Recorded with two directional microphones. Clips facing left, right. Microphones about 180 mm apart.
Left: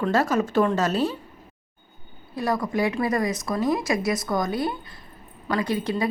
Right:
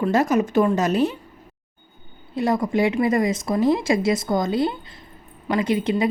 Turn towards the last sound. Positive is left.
turn(degrees=-20)  # may be behind; listen again after turning